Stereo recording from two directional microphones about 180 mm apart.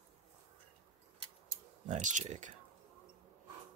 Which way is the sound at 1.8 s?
40° right (ahead or behind).